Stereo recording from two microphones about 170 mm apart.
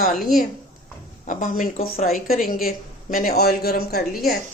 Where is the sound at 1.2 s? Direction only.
50° left (ahead or behind); by 4.4 s 65° left (ahead or behind).